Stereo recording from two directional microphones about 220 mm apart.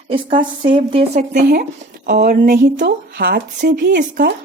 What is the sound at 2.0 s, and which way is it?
Speech, 45° right (ahead or behind).